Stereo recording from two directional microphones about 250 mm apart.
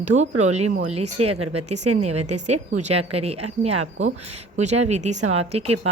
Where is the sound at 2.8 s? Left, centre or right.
Right.